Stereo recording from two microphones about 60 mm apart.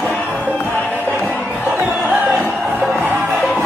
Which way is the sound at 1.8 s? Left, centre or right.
Right.